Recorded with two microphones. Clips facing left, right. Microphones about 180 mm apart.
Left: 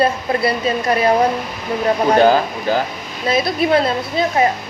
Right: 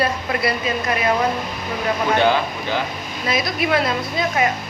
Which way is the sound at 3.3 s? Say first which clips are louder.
Left 5 dB; 30° left (ahead or behind).